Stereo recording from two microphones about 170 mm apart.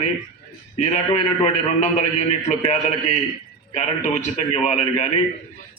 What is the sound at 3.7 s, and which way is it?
A man's voice, 45° left (ahead or behind).